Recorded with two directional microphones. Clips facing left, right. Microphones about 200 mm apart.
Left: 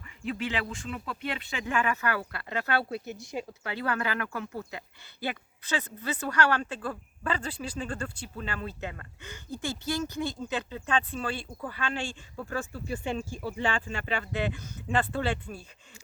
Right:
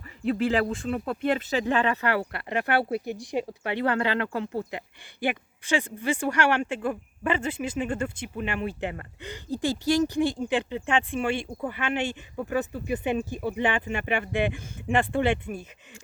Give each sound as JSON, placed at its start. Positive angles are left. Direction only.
{"t": 0.3, "sound": "speech", "side_deg": -40}
{"t": 5.2, "sound": "speech", "side_deg": -15}
{"t": 6.4, "sound": "speech", "side_deg": -25}
{"t": 9.5, "sound": "speech", "side_deg": -35}
{"t": 9.9, "sound": "speech", "side_deg": -15}